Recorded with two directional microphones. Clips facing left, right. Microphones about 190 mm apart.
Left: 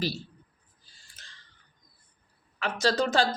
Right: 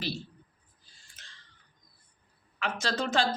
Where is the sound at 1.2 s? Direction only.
35° left (ahead or behind).